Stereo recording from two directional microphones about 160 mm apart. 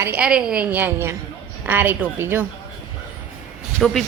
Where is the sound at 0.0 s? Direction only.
10° right (ahead or behind).